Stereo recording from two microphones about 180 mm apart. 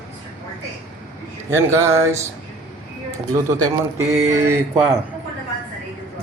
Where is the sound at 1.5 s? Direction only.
15° right (ahead or behind).